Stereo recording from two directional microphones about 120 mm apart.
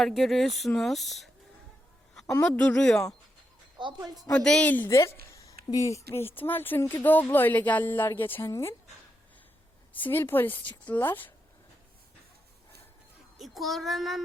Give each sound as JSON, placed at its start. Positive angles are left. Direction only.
{"t": 0.0, "sound": "speech", "side_deg": 0}
{"t": 2.4, "sound": "a woman's voice", "side_deg": 10}
{"t": 3.8, "sound": "a woman's voice", "side_deg": -40}
{"t": 4.4, "sound": "a woman's voice", "side_deg": 10}
{"t": 4.7, "sound": "a woman's voice", "side_deg": 20}
{"t": 9.9, "sound": "a woman's voice", "side_deg": 15}
{"t": 13.4, "sound": "speech", "side_deg": 0}